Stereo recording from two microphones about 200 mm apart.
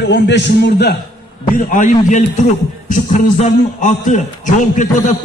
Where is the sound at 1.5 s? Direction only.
40° left (ahead or behind).